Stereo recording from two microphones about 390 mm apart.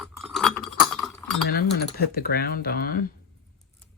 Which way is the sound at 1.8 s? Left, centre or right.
Left.